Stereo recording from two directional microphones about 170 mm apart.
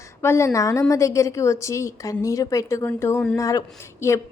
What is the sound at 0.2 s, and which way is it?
A woman's voice, 15° left (ahead or behind).